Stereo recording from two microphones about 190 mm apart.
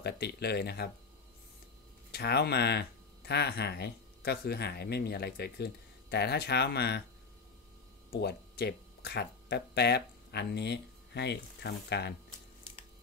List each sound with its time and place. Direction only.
0.0 s speech: 60° left (ahead or behind)
2.1 s speech: 60° left (ahead or behind)
8.2 s speech: 60° left (ahead or behind)